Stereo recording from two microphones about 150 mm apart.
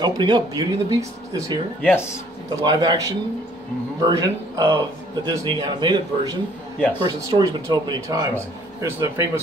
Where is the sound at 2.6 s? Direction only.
25° right (ahead or behind).